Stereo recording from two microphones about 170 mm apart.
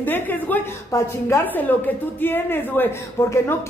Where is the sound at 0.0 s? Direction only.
10° left (ahead or behind).